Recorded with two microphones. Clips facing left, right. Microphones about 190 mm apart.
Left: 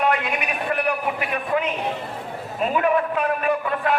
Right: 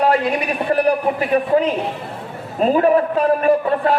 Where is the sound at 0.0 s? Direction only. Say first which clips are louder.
Right 6 dB; 35° right (ahead or behind).